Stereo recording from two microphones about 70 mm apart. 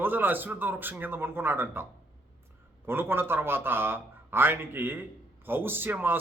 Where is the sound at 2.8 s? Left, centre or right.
Right.